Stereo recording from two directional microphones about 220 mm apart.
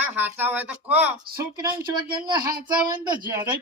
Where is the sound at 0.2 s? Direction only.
10° right (ahead or behind).